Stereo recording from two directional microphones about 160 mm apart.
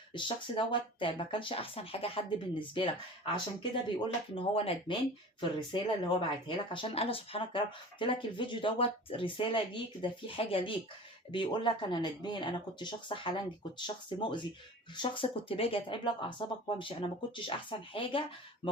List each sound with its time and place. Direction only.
0.1 s speech: 30° left (ahead or behind)